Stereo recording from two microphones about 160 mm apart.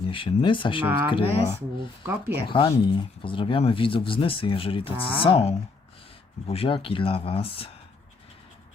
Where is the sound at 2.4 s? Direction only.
30° left (ahead or behind).